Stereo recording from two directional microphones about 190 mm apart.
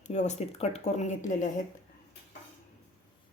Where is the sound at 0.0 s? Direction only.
40° left (ahead or behind).